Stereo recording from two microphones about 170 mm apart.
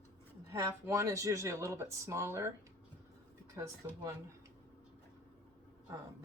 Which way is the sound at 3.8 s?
20° right (ahead or behind).